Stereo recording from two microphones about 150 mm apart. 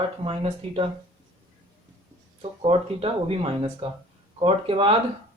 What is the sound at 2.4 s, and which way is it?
Speech, 40° right (ahead or behind).